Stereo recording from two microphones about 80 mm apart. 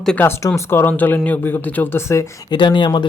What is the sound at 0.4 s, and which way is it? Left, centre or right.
Speech, left.